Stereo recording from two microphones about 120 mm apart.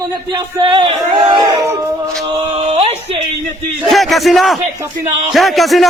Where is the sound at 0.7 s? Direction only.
45° right (ahead or behind).